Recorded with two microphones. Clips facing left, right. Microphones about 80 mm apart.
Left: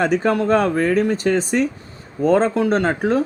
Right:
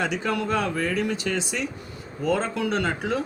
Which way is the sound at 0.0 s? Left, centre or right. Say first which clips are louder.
Left 8 dB; left.